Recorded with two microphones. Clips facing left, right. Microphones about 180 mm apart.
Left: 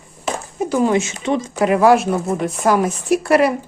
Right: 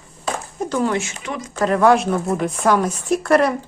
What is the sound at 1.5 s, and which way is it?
Speech, 10° left (ahead or behind).